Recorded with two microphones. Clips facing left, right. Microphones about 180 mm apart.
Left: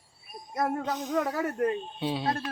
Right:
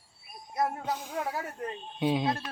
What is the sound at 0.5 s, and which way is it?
Speech, 70° left (ahead or behind).